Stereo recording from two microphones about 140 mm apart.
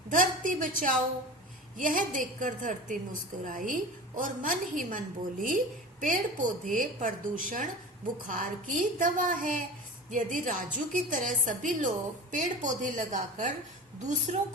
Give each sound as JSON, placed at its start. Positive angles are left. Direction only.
{"t": 0.1, "sound": "a woman's voice", "side_deg": -70}